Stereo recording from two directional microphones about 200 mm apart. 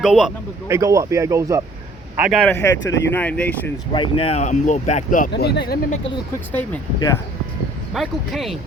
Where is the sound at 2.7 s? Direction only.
65° left (ahead or behind).